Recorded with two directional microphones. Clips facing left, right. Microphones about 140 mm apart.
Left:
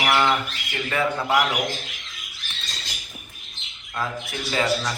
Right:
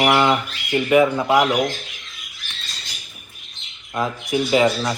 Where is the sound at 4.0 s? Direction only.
20° right (ahead or behind).